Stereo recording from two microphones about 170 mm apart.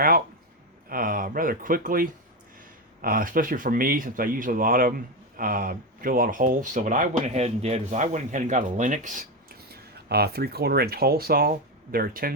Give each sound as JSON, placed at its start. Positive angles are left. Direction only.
{"t": 0.9, "sound": "speech", "side_deg": -55}
{"t": 10.1, "sound": "speech", "side_deg": -70}